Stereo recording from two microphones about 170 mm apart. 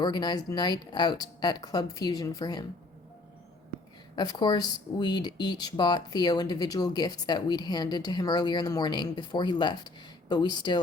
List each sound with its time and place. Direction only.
0.0 s speech: 25° left (ahead or behind)
4.1 s speech: 25° left (ahead or behind)